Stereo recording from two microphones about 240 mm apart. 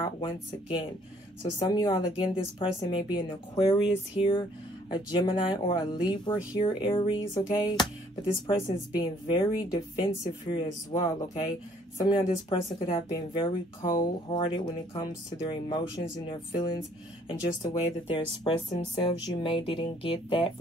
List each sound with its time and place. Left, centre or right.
0.0 s speech: centre
18.1 s speech: centre